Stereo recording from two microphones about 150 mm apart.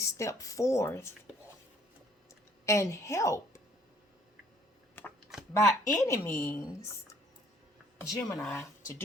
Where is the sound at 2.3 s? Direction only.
20° left (ahead or behind).